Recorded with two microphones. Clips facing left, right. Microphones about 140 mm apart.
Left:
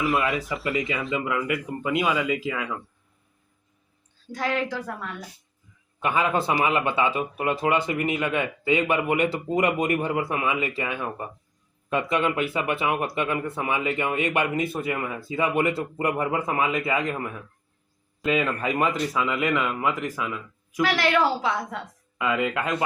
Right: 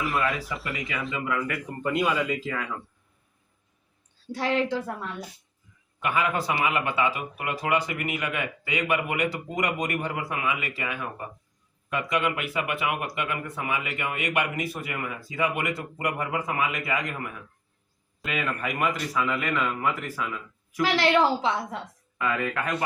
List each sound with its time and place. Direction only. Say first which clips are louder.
0.0 s speech: left 3 dB; centre (ahead or behind)
0.7 s speech: left 7 dB; 25° left (ahead or behind)
1.8 s speech: right 1 dB; 5° left (ahead or behind)
4.3 s a woman's voice: right 1 dB; 30° right (ahead or behind)
6.0 s speech: left 3 dB; 25° left (ahead or behind)
20.8 s a woman's voice: even; 25° right (ahead or behind)
22.2 s speech: left 3 dB; 20° left (ahead or behind)